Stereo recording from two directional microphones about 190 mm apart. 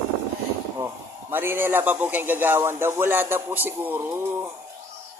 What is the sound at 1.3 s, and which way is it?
Speech, 10° right (ahead or behind).